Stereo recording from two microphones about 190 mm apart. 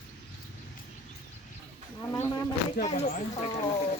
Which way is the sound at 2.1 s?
20° left (ahead or behind).